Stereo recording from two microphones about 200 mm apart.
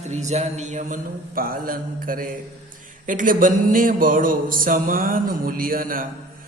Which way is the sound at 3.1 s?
40° right (ahead or behind).